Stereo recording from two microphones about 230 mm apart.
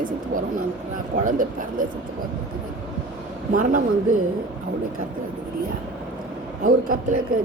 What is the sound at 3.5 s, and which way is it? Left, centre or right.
Speech, right.